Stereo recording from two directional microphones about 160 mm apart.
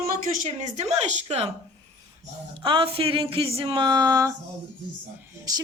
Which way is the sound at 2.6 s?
30° right (ahead or behind).